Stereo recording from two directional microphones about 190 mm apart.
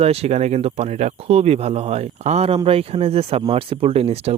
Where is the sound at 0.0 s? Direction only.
35° right (ahead or behind).